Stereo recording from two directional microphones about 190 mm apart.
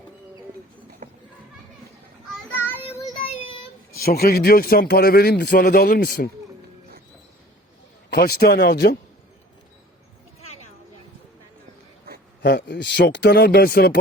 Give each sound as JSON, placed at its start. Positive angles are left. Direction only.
{"t": 1.0, "sound": "children playing", "side_deg": -40}
{"t": 2.6, "sound": "child singing", "side_deg": 10}
{"t": 3.9, "sound": "a man's voice", "side_deg": 55}
{"t": 8.1, "sound": "speech", "side_deg": 60}
{"t": 12.4, "sound": "speech", "side_deg": 55}